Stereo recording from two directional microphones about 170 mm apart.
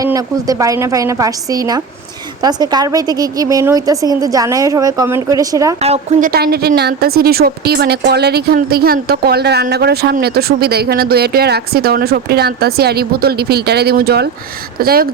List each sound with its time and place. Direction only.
0.0 s a woman's voice: 20° right (ahead or behind)
5.8 s a woman's voice: 40° right (ahead or behind)
6.2 s a woman's voice: 65° right (ahead or behind)